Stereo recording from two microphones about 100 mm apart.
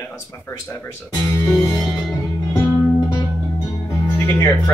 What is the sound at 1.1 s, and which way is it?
Music, 35° left (ahead or behind).